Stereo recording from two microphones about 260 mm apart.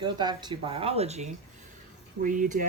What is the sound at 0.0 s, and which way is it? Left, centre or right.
Speech, centre.